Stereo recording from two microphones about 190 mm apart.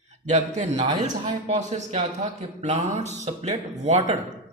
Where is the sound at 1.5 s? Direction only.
40° right (ahead or behind).